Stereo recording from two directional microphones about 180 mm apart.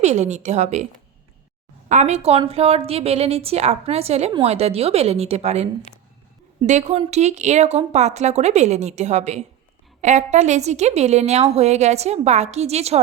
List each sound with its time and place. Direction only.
0.0 s a woman's voice: 40° right (ahead or behind)
1.9 s a woman's voice: 40° right (ahead or behind)